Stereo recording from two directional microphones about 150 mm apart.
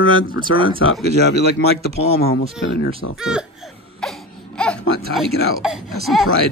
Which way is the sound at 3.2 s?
5° right (ahead or behind).